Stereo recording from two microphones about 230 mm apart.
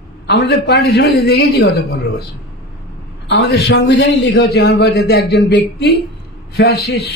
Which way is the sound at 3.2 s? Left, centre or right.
Left.